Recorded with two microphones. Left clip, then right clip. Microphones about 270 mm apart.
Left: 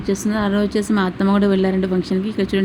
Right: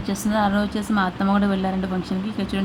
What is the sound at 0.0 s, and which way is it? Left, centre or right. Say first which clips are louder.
A woman's voice: left 1 dB; centre.